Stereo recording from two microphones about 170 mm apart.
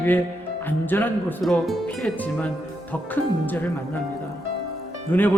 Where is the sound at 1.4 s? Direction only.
Centre (ahead or behind).